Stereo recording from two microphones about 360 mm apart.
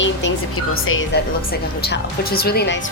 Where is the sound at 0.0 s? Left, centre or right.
Left.